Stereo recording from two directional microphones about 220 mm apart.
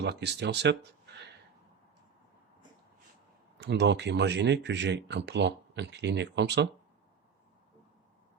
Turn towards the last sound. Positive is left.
turn(degrees=-50)  # may be behind; listen again after turning